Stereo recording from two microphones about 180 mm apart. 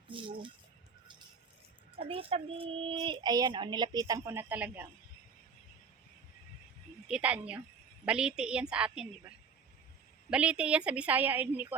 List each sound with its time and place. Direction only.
0.1 s speech: 30° right (ahead or behind)
2.0 s speech: 30° right (ahead or behind); by 4.9 s 10° right (ahead or behind)
7.1 s a woman's voice: 5° right (ahead or behind)
10.2 s a woman's voice: 5° right (ahead or behind)